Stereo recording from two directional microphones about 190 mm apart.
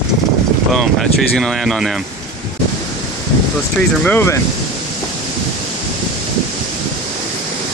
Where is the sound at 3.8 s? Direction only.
10° left (ahead or behind).